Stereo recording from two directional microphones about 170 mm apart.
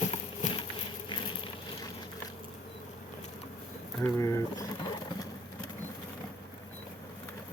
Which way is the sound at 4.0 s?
20° left (ahead or behind).